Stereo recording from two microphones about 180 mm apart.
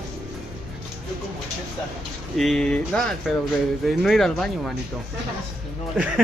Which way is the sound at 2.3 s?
Centre (ahead or behind).